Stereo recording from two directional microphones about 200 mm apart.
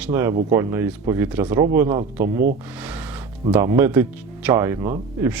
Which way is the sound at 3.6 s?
10° right (ahead or behind).